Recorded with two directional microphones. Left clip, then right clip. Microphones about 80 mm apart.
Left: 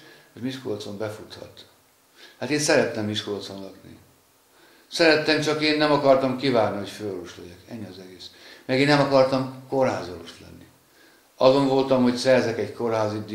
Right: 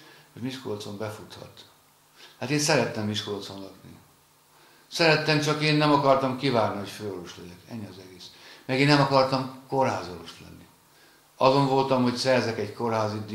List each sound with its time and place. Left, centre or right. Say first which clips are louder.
0.4 s a man's voice: left 3 dB; centre
4.8 s a man's voice: left 3 dB; centre
11.3 s a man's voice: left 3 dB; centre